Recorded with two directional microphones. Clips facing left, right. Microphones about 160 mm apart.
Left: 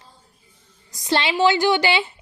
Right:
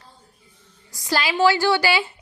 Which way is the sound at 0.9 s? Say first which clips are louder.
Left 2 dB; 20° left (ahead or behind).